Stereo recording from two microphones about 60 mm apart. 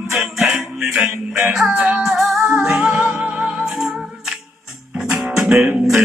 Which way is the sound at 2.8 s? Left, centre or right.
Right.